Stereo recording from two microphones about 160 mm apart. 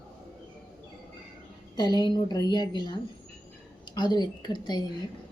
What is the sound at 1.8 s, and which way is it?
A woman's voice, 30° left (ahead or behind).